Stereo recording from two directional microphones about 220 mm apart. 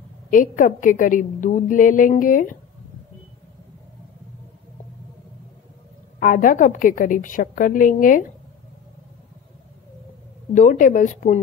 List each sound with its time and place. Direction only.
0.3 s a woman's voice: 40° left (ahead or behind)
6.1 s a woman's voice: 40° left (ahead or behind)
10.5 s a woman's voice: 35° left (ahead or behind)